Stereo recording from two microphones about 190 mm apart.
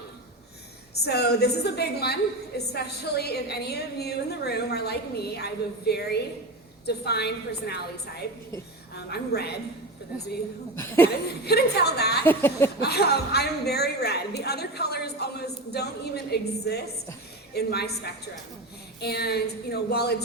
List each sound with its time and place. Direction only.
1.0 s a woman's voice: 60° left (ahead or behind)
9.0 s a woman's voice: 60° left (ahead or behind)
10.8 s a sound: 10° left (ahead or behind)
11.4 s a woman's voice: 60° left (ahead or behind)
12.2 s a sound: 10° left (ahead or behind)
12.8 s a woman's voice: 60° left (ahead or behind)
18.9 s a woman's voice: 60° left (ahead or behind)